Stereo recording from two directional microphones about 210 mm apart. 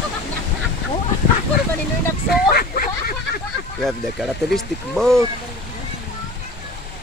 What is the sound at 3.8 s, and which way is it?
Speech, centre (ahead or behind).